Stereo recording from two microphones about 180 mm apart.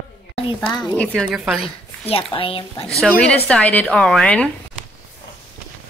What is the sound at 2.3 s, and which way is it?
Speech, 30° left (ahead or behind).